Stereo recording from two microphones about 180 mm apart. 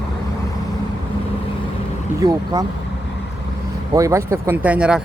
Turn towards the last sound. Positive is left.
turn(degrees=-5)  # may be behind; listen again after turning